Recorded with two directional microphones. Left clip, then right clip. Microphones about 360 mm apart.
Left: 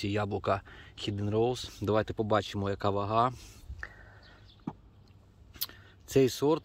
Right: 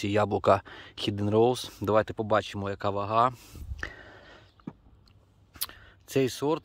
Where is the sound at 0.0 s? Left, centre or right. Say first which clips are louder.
Right 7 dB; centre.